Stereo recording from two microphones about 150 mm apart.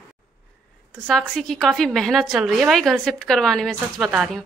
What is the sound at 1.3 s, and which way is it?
A woman's voice, centre (ahead or behind).